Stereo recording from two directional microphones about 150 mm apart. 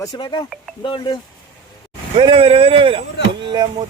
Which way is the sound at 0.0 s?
30° left (ahead or behind).